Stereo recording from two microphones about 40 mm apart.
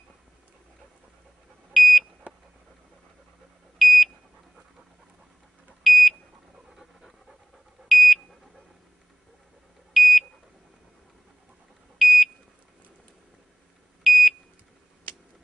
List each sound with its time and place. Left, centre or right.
1.7 s smoke detector: centre
2.3 s a sound: right
3.7 s a sound: centre
5.9 s smoke detector: centre
6.7 s pant: centre
7.9 s beep: centre
9.9 s beep: centre
12.0 s smoke detector: centre
14.0 s beep: centre